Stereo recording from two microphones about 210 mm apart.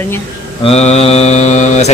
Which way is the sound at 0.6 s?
30° left (ahead or behind).